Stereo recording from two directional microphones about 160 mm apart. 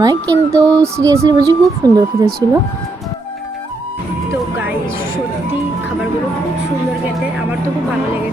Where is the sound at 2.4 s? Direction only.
20° left (ahead or behind).